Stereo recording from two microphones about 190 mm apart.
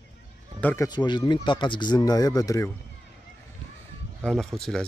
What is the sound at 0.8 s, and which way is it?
Speech, 25° left (ahead or behind).